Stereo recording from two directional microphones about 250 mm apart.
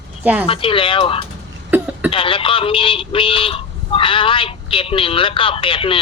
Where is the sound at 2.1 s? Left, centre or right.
Left.